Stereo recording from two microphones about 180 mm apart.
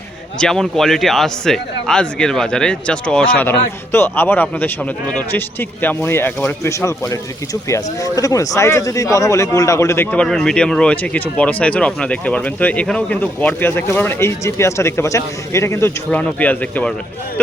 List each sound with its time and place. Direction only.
0.3 s a man's voice: 5° left (ahead or behind)